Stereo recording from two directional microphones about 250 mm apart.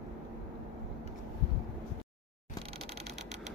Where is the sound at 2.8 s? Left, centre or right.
Right.